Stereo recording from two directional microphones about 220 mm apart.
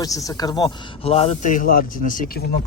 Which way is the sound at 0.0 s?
15° left (ahead or behind).